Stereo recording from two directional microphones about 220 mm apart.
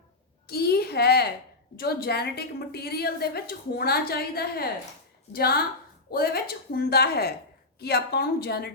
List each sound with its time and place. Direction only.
0.4 s a woman's voice: 45° left (ahead or behind)